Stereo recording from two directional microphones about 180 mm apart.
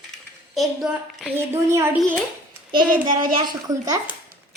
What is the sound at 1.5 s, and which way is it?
Speech, 15° right (ahead or behind).